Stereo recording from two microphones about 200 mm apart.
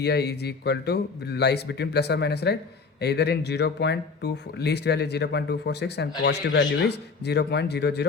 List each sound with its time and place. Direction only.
0.0 s speech: 55° left (ahead or behind)